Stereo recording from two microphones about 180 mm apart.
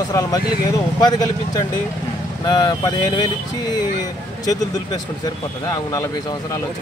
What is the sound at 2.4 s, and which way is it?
Speech, 20° left (ahead or behind).